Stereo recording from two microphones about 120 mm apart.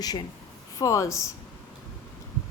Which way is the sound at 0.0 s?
35° left (ahead or behind).